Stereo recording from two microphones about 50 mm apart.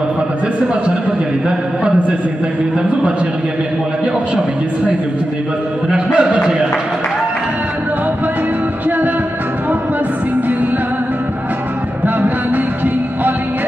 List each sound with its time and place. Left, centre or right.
5.9 s speech: right